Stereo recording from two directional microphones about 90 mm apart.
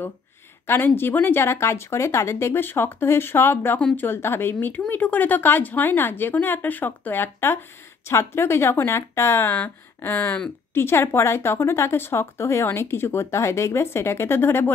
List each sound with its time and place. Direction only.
0.7 s speech: 25° left (ahead or behind)